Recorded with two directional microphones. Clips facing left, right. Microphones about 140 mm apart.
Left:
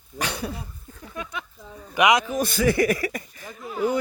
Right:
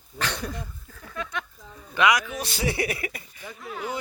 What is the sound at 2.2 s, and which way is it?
Speech, 45° left (ahead or behind).